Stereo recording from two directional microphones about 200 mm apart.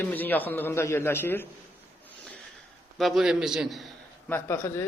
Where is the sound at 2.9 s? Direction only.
Centre (ahead or behind).